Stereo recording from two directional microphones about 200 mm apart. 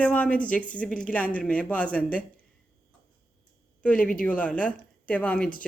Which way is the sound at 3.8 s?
5° left (ahead or behind).